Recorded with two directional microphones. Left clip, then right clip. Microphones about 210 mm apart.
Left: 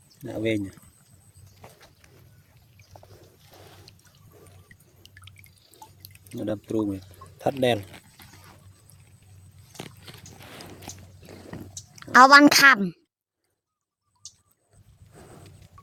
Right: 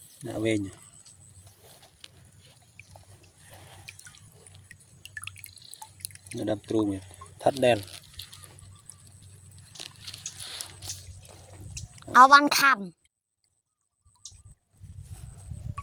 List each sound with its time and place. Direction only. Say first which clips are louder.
0.2 s speech: left 1 dB; 15° left (ahead or behind)
5.1 s drip: right 11 dB; 50° right (ahead or behind)
6.3 s speech: even; 30° left (ahead or behind)
7.3 s speech: right 1 dB; 40° left (ahead or behind)
11.9 s a woman's voice: left 3 dB; 35° left (ahead or behind)